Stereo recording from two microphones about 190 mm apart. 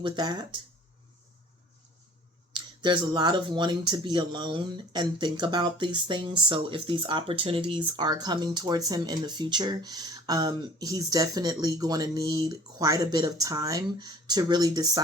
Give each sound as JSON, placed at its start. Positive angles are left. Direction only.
{"t": 0.0, "sound": "speech", "side_deg": -20}
{"t": 2.5, "sound": "speech", "side_deg": -25}